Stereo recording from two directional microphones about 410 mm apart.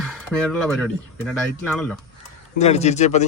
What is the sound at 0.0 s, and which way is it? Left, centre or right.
Speech, centre.